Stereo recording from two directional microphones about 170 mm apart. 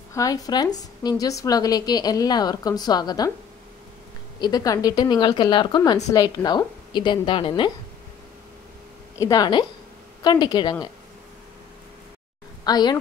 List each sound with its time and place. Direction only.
0.1 s a woman's voice: 20° left (ahead or behind)
4.4 s a woman's voice: 25° left (ahead or behind)
9.2 s a woman's voice: 25° left (ahead or behind)
12.6 s a woman's voice: 25° left (ahead or behind)